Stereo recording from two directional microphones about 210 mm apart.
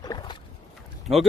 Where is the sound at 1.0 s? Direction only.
Centre (ahead or behind).